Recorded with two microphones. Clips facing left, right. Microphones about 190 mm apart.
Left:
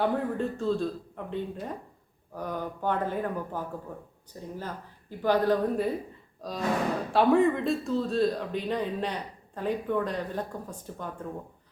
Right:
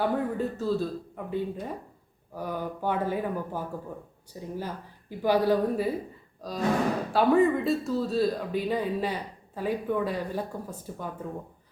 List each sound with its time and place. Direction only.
0.0 s a woman's voice: 5° right (ahead or behind)